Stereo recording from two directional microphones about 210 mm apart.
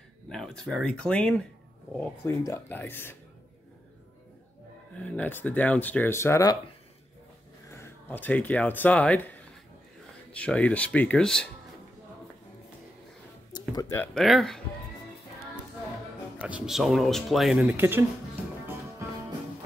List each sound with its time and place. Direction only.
0.3 s speech: centre (ahead or behind)
4.9 s speech: 5° left (ahead or behind)
7.7 s speech: 10° left (ahead or behind)
13.5 s music: 20° left (ahead or behind)
14.1 s speech: centre (ahead or behind)
16.3 s speech: 5° right (ahead or behind)